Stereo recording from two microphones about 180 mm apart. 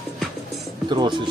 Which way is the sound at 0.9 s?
25° right (ahead or behind).